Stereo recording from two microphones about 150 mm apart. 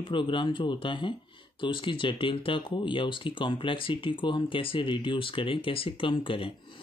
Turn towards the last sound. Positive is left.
turn(degrees=35)  # may be behind; listen again after turning